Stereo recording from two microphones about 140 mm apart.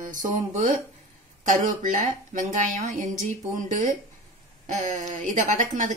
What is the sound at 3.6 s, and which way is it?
A woman's voice, 70° right (ahead or behind).